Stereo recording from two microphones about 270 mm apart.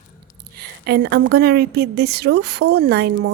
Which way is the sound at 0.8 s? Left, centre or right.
Right.